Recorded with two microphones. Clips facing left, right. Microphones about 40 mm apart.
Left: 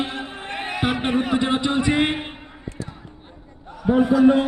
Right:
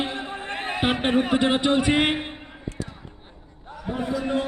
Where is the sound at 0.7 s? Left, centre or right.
Right.